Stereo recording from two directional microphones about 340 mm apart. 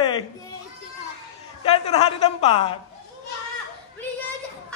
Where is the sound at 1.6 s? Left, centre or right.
Centre.